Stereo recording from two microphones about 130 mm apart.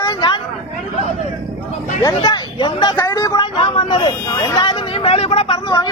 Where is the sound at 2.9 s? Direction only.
20° left (ahead or behind).